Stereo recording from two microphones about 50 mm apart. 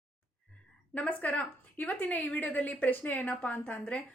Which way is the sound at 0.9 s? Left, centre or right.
Left.